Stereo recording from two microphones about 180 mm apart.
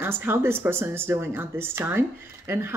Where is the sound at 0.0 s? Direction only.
10° right (ahead or behind).